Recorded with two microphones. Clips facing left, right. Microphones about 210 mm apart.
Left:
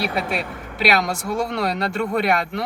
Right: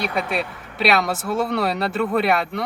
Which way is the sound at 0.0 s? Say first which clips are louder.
Even; centre (ahead or behind).